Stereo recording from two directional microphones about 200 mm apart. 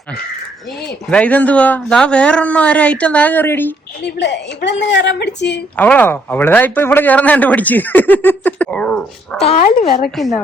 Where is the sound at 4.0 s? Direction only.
60° left (ahead or behind).